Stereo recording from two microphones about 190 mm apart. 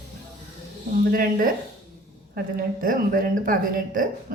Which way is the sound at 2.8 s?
45° right (ahead or behind).